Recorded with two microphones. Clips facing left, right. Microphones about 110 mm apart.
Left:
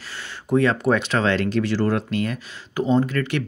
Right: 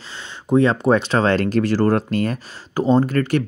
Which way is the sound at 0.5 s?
30° right (ahead or behind).